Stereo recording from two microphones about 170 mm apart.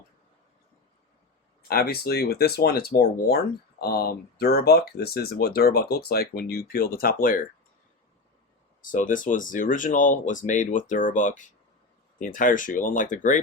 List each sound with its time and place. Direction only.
1.6 s speech: 65° left (ahead or behind)
8.8 s speech: 50° left (ahead or behind)